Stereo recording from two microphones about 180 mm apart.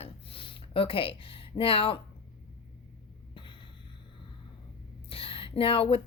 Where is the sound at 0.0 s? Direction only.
30° left (ahead or behind).